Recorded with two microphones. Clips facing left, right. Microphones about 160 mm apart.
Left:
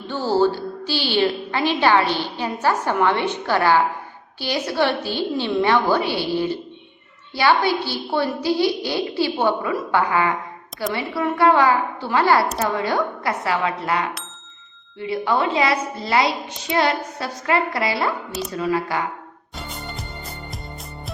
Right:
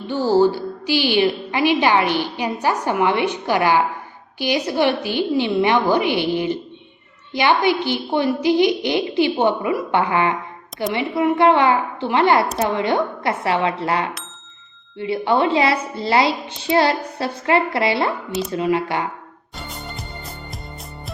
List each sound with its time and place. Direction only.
0.1 s a woman's voice: 15° right (ahead or behind)
18.3 s speech: centre (ahead or behind)
18.5 s a woman's voice: 25° right (ahead or behind)
19.5 s music: centre (ahead or behind)